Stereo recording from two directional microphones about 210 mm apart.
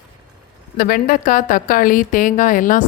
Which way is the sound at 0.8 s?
45° left (ahead or behind).